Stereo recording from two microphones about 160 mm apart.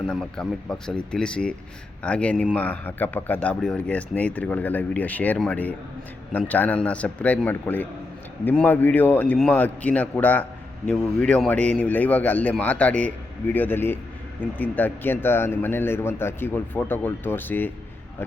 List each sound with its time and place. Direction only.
0.1 s speech: 5° left (ahead or behind)